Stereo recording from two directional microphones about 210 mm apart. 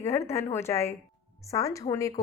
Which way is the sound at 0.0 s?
10° left (ahead or behind).